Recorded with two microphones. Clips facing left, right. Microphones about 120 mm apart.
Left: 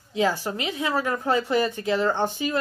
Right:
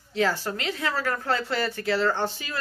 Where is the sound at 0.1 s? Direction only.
15° left (ahead or behind).